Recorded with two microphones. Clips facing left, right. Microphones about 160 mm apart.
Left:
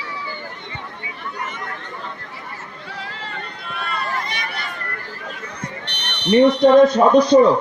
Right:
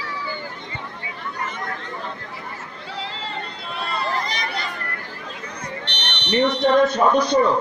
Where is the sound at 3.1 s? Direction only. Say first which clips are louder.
Right 1 dB; 25° right (ahead or behind).